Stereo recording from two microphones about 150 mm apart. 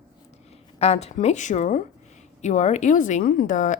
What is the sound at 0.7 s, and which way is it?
A woman's voice, 45° left (ahead or behind).